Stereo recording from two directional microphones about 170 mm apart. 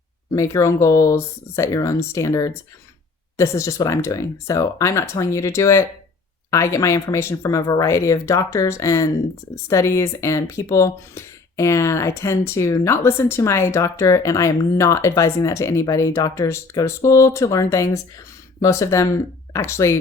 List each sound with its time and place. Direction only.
0.3 s speech: 20° left (ahead or behind)